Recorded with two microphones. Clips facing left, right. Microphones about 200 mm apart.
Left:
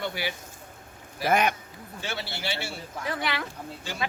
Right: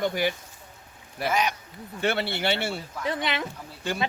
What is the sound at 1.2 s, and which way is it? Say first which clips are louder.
Speech: left 2 dB; 55° left (ahead or behind).